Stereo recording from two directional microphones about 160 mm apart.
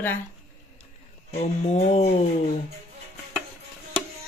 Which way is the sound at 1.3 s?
45° left (ahead or behind).